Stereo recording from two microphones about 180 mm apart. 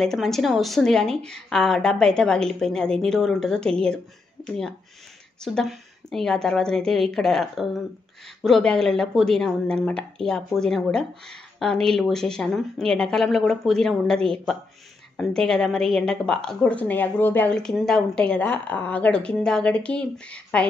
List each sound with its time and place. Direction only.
0.0 s speech: centre (ahead or behind)